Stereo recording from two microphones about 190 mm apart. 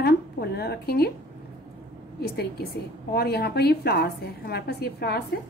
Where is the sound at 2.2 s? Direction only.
60° left (ahead or behind).